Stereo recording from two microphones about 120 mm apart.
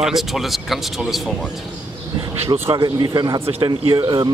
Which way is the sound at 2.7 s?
35° right (ahead or behind).